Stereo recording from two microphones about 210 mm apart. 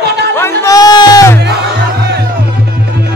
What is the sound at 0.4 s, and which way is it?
Music, 10° left (ahead or behind).